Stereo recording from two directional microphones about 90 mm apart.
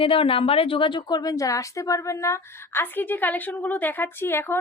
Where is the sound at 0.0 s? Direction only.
85° left.